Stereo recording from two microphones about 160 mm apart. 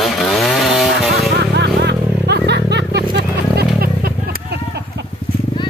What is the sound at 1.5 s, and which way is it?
Music, 90° right.